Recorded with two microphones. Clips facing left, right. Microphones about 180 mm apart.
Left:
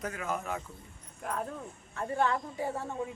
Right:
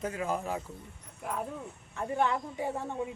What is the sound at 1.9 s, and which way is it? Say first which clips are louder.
A woman's voice: even; 15° right (ahead or behind).